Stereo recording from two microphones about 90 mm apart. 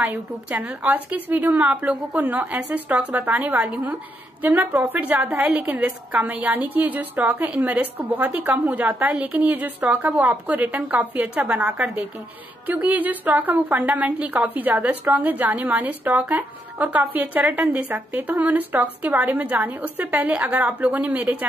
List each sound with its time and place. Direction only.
0.0 s a woman's voice: 20° right (ahead or behind)